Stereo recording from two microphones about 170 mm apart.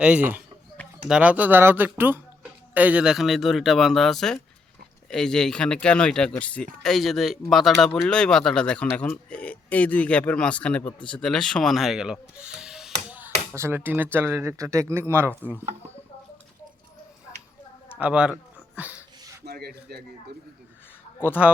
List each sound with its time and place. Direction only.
0.0 s speech: 10° right (ahead or behind)
13.1 s tap: 10° right (ahead or behind)
13.5 s speech: 15° right (ahead or behind)
17.9 s speech: 5° right (ahead or behind)
19.5 s speech: 65° right (ahead or behind)